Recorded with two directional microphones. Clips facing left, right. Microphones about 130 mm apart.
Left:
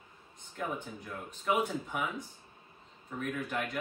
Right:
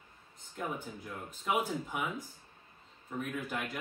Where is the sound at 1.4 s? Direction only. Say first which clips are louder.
Left 2 dB; 5° right (ahead or behind).